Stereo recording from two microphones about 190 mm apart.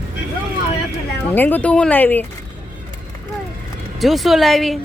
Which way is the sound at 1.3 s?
10° left (ahead or behind).